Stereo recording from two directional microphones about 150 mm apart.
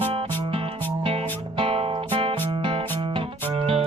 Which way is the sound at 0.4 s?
35° right (ahead or behind).